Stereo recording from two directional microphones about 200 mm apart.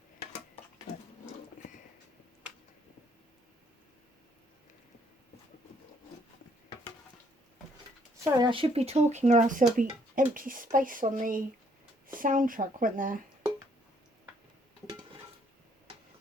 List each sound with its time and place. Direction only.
8.2 s speech: 25° right (ahead or behind); by 13.1 s 45° right (ahead or behind)